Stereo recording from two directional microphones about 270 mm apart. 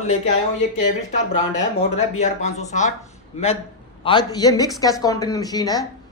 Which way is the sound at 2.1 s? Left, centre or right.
Left.